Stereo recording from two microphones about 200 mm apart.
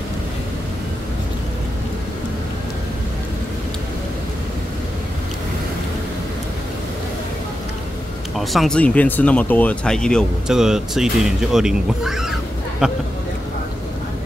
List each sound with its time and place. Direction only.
8.4 s speech: centre (ahead or behind)